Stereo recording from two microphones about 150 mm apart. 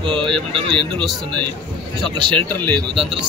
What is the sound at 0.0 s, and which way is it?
Speech, 35° right (ahead or behind).